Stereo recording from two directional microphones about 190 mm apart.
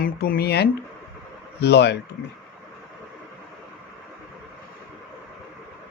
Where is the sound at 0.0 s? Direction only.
50° left (ahead or behind).